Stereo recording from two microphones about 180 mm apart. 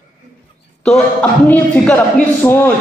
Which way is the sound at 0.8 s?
5° left (ahead or behind).